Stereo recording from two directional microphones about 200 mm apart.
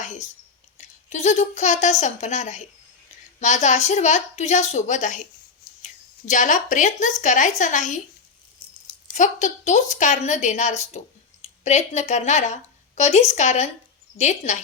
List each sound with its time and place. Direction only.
0.8 s a woman's voice: 35° left (ahead or behind)
9.1 s a woman's voice: 35° left (ahead or behind)